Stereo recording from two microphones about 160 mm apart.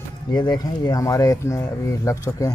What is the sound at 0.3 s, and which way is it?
Speech, 25° left (ahead or behind).